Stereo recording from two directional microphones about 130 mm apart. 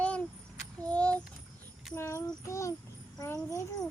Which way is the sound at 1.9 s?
20° left (ahead or behind).